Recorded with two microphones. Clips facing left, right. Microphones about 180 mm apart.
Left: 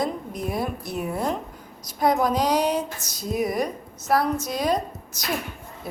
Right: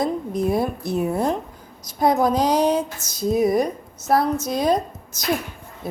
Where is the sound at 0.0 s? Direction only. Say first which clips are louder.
Right 5 dB; 25° right (ahead or behind).